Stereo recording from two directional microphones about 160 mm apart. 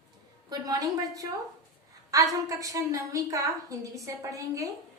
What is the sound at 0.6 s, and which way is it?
A woman's voice, 25° right (ahead or behind).